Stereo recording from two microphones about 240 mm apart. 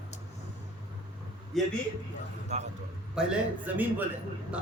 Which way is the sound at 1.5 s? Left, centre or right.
Centre.